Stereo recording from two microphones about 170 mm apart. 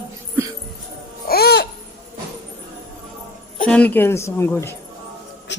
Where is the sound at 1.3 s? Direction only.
70° left (ahead or behind).